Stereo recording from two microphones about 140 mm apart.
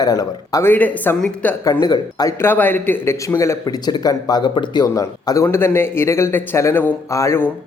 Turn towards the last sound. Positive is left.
turn(degrees=20)  # may be behind; listen again after turning